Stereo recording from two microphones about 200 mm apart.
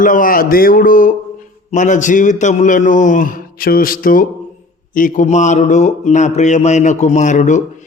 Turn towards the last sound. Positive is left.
turn(degrees=40)  # may be behind; listen again after turning